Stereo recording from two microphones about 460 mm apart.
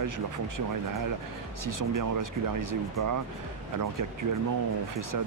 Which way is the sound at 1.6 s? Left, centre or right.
Right.